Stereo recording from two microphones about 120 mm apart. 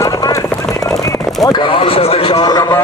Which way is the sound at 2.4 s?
30° left (ahead or behind).